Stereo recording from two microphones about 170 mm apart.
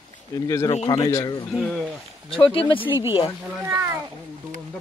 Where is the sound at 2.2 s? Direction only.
30° left (ahead or behind).